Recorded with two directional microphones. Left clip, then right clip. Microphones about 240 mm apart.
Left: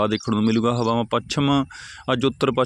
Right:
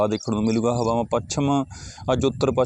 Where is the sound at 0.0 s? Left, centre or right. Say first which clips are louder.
Left 1 dB; centre.